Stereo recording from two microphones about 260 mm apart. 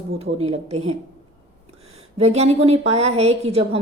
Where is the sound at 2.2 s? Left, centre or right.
Right.